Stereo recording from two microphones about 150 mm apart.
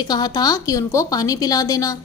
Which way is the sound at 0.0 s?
25° left (ahead or behind).